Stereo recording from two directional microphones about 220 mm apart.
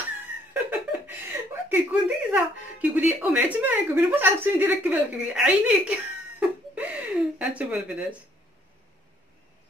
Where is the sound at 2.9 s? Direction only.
5° right (ahead or behind).